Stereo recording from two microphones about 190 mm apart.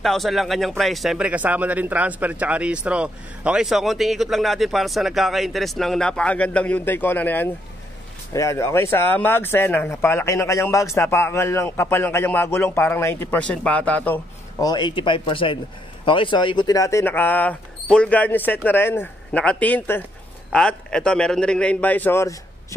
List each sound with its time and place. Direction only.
0.0 s speech: centre (ahead or behind)
14.6 s speech: 20° left (ahead or behind)